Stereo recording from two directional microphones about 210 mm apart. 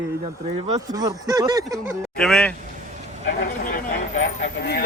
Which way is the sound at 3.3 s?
50° left (ahead or behind).